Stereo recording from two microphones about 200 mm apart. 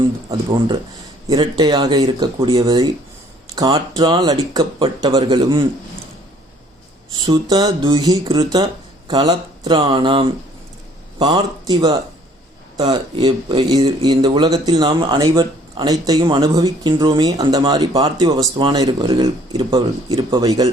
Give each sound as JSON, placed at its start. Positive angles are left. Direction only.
{"t": 0.3, "sound": "speech", "side_deg": -20}
{"t": 7.2, "sound": "speech", "side_deg": -20}